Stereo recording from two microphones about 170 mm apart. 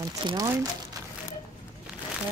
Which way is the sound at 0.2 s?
25° right (ahead or behind).